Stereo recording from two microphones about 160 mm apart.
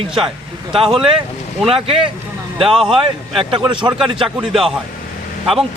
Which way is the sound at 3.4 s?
35° right (ahead or behind).